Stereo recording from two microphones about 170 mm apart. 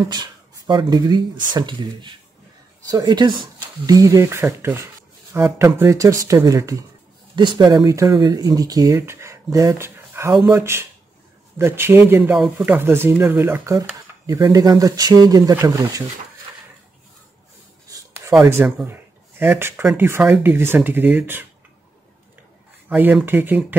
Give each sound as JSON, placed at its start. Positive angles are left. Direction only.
{"t": 0.1, "sound": "speech", "side_deg": -25}
{"t": 18.5, "sound": "speech", "side_deg": -10}
{"t": 22.8, "sound": "speech", "side_deg": -10}